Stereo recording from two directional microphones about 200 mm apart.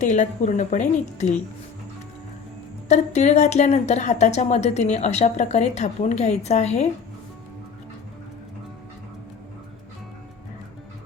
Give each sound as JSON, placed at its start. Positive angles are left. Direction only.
{"t": 0.0, "sound": "speech", "side_deg": 35}
{"t": 2.9, "sound": "speech", "side_deg": 35}